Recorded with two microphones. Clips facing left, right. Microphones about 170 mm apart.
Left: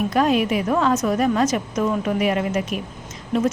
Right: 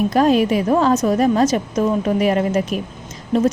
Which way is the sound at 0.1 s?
35° right (ahead or behind).